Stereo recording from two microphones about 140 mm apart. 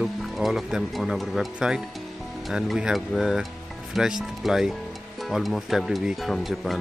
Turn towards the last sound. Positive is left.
turn(degrees=0)  # may be behind; listen again after turning